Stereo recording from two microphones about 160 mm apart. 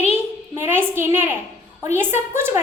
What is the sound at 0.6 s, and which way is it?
A child's voice, 15° right (ahead or behind).